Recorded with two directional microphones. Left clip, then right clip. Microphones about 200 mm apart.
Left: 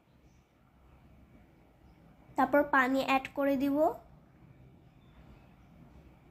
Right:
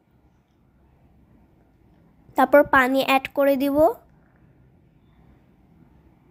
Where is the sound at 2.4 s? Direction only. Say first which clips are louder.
Right 11 dB; 40° right (ahead or behind).